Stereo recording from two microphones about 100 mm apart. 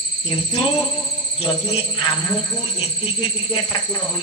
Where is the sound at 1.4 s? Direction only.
70° left (ahead or behind).